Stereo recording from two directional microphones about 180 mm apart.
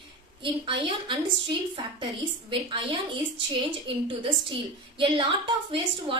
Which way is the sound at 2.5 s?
30° right (ahead or behind).